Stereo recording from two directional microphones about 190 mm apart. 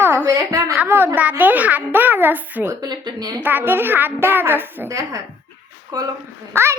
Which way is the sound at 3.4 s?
10° right (ahead or behind).